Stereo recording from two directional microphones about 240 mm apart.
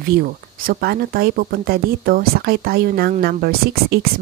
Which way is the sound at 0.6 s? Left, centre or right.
Right.